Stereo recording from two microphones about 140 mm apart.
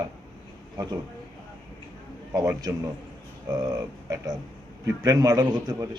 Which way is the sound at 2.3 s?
20° right (ahead or behind).